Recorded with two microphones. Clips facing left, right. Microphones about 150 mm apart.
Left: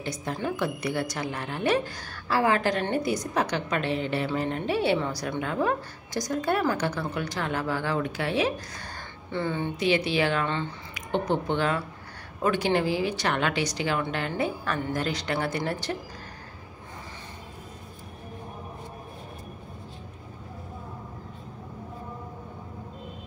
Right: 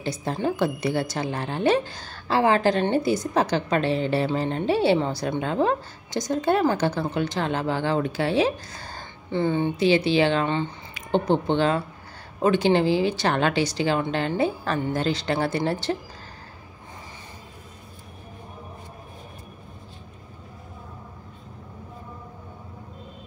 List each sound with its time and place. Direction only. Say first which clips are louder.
0.0 s a woman's voice: right 5 dB; 30° right (ahead or behind)
11.1 s a woman's voice: right 5 dB; 30° right (ahead or behind)